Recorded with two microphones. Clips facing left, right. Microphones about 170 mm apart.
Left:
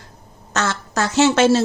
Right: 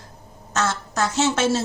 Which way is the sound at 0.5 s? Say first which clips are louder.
Left 2 dB; 75° left (ahead or behind).